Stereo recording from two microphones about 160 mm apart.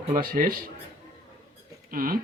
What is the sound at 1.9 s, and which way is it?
Speech, 65° right (ahead or behind).